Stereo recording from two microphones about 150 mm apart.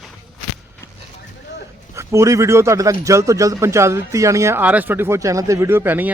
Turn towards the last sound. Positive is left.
turn(degrees=-15)  # may be behind; listen again after turning